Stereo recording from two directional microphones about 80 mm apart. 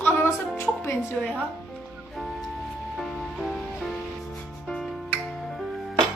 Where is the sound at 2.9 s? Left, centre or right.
Centre.